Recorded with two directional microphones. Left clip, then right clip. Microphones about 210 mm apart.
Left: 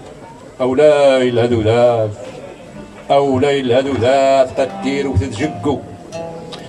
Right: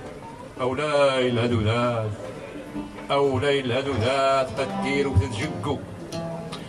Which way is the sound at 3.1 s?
45° left (ahead or behind).